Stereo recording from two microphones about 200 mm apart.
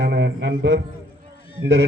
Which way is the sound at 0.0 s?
60° right (ahead or behind).